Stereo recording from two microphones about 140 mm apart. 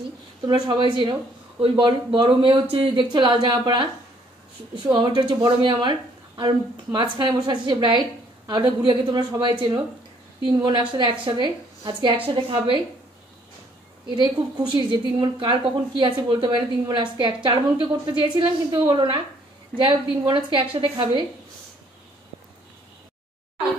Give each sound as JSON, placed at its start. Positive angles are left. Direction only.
{"t": 0.5, "sound": "a woman's voice", "side_deg": -35}
{"t": 4.9, "sound": "a woman's voice", "side_deg": -35}
{"t": 14.0, "sound": "a woman's voice", "side_deg": -30}